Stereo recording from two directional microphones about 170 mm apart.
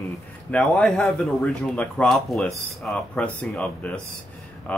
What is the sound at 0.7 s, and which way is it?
Speech, 5° left (ahead or behind).